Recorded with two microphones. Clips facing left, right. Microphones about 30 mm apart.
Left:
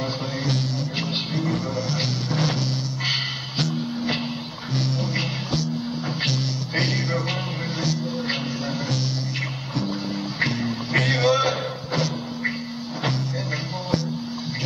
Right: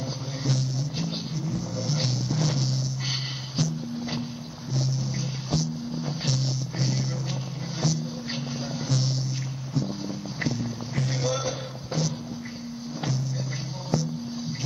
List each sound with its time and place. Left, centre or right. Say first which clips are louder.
0.5 s music: even; left
1.8 s music: left 3 dB; left
2.3 s a sound: left 5 dB; left
3.5 s music: left 3 dB; left
6.8 s music: left 6 dB; left
7.8 s music: left 2 dB; left
10.9 s music: left 11 dB; left
11.1 s music: left 7 dB; left